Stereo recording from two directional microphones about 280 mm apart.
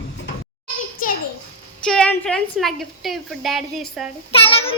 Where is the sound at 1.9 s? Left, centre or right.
Centre.